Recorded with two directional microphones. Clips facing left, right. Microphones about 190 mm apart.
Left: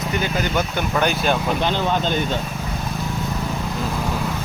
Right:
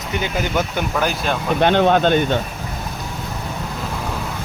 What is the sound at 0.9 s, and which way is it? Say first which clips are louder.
Speech: left 1 dB; centre (ahead or behind).